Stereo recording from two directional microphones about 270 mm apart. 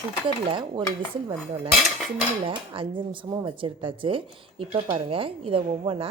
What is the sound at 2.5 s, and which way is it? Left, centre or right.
Speech, centre.